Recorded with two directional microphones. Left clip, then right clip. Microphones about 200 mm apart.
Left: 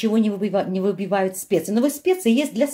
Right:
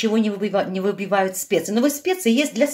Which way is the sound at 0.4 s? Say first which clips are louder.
Right 1 dB; 30° left (ahead or behind).